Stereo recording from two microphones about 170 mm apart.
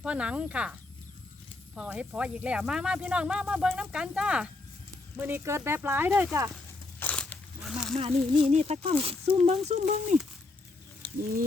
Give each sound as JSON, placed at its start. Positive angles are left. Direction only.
{"t": 0.0, "sound": "speech", "side_deg": -5}
{"t": 7.0, "sound": "crunch", "side_deg": 10}
{"t": 7.9, "sound": "speech", "side_deg": -35}